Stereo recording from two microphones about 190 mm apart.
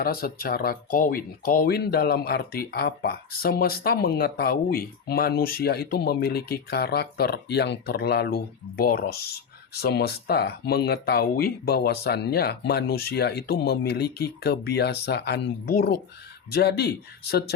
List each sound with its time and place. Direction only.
0.0 s speech: 50° left (ahead or behind)